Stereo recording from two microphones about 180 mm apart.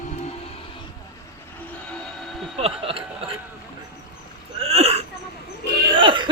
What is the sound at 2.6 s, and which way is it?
Speech, 30° right (ahead or behind).